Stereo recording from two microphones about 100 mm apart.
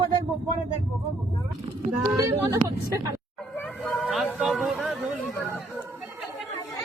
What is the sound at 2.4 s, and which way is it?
Speech, 30° right (ahead or behind).